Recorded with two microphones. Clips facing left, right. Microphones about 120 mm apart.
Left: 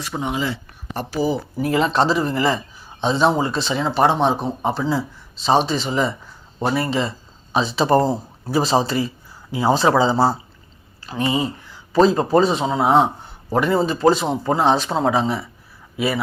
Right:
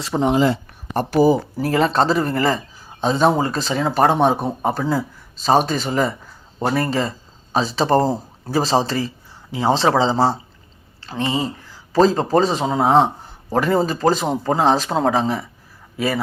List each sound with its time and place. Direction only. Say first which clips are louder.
0.0 s speech: right 7 dB; 35° right (ahead or behind)
1.5 s speech: right 1 dB; 35° right (ahead or behind)
7.5 s speech: even; 35° right (ahead or behind)